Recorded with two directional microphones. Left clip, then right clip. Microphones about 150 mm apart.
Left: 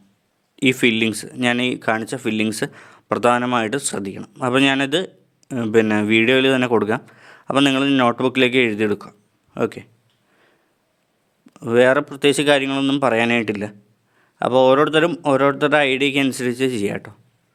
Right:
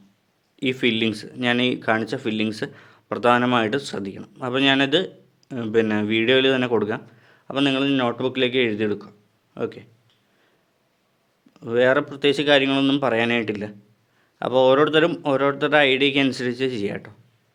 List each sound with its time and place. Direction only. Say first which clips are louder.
0.5 s speech: left 5 dB; 35° left (ahead or behind)
11.5 s speech: left 4 dB; 35° left (ahead or behind)